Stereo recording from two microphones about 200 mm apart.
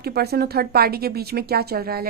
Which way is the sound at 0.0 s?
50° right (ahead or behind).